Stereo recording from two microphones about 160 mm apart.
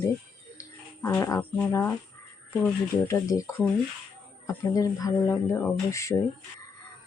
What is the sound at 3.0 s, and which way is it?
Speech, 20° left (ahead or behind).